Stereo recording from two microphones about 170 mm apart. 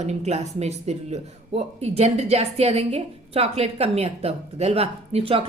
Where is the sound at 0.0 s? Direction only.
40° right (ahead or behind).